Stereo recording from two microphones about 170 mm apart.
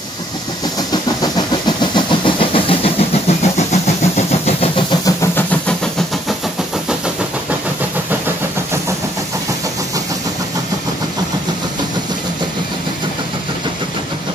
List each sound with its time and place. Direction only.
1.2 s vehicle: 25° left (ahead or behind)
5.0 s vehicle: 15° left (ahead or behind)